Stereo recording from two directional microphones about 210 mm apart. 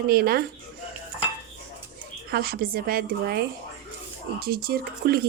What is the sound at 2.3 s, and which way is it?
Speech, 45° right (ahead or behind).